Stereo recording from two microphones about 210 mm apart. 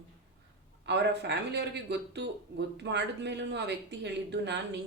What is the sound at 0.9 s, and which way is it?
Speech, 55° right (ahead or behind).